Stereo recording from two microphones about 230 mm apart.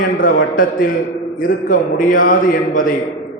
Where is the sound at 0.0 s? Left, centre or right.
Left.